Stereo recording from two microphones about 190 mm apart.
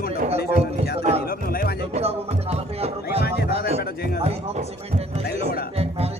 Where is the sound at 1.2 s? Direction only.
50° left (ahead or behind).